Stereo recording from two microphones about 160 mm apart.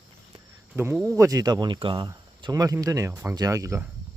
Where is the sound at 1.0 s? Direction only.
20° right (ahead or behind).